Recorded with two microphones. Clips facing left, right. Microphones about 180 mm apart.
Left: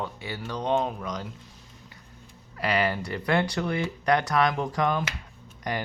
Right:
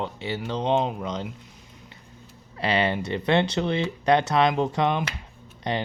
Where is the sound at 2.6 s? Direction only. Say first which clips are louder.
Right 2 dB; 25° right (ahead or behind).